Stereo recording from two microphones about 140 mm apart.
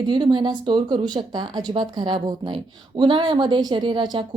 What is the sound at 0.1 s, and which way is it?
Speech, 35° right (ahead or behind).